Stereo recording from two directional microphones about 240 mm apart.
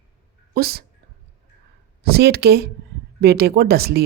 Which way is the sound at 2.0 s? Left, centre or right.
Right.